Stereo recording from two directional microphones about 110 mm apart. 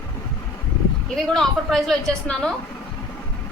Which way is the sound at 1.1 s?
5° left (ahead or behind).